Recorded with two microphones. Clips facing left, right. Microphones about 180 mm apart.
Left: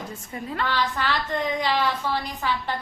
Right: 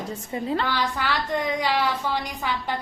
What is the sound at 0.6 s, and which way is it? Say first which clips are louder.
Speech: even; 10° right (ahead or behind).